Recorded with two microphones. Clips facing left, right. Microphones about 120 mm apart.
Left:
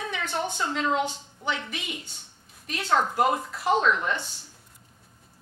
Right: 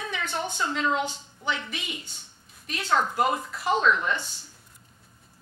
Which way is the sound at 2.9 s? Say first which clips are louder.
Left 1 dB; 30° left (ahead or behind).